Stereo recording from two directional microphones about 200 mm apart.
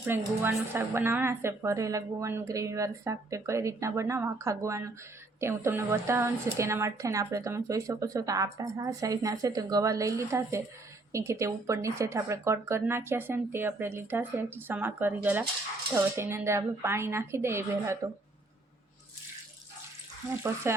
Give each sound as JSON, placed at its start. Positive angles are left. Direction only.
{"t": 0.0, "sound": "speech", "side_deg": -10}
{"t": 20.7, "sound": "speech", "side_deg": -15}